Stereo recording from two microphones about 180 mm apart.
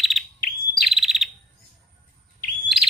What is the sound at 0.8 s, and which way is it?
Chirp, centre (ahead or behind).